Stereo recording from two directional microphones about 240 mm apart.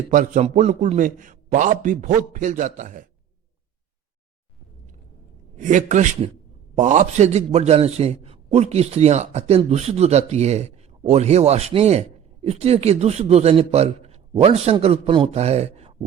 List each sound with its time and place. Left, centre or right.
0.1 s a man's voice: right
5.5 s a man's voice: right